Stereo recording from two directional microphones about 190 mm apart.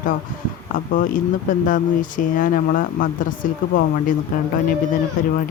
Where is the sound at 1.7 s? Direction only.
45° left (ahead or behind).